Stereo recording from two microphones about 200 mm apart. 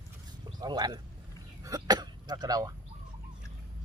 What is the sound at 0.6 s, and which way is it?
Speech, 20° right (ahead or behind).